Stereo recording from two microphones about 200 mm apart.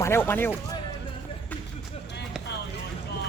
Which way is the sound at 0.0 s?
10° left (ahead or behind).